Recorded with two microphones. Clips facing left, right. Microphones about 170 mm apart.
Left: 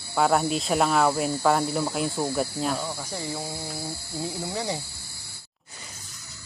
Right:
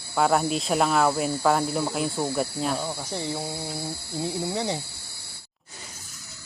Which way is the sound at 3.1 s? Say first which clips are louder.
Right 2 dB; 25° right (ahead or behind).